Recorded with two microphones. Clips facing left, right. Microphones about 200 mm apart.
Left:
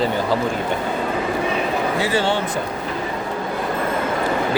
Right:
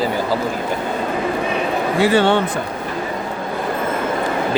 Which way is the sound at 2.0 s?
60° right (ahead or behind).